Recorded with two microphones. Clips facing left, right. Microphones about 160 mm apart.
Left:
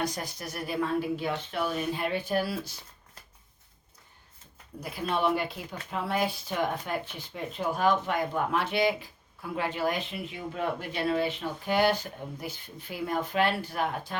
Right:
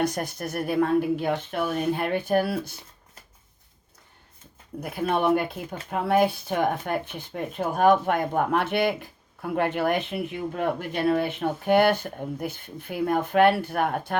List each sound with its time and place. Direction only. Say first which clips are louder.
0.0 s speech: right 6 dB; 60° right (ahead or behind)
4.8 s speech: right 4 dB; 55° right (ahead or behind)